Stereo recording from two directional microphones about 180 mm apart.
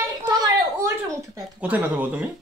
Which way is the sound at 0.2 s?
20° right (ahead or behind).